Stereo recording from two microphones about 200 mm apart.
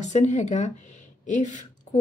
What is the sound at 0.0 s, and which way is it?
Speech, 35° left (ahead or behind).